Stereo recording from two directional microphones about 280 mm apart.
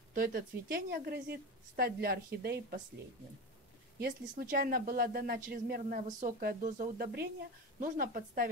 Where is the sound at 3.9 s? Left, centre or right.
Right.